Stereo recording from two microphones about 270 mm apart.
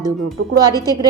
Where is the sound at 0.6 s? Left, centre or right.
Centre.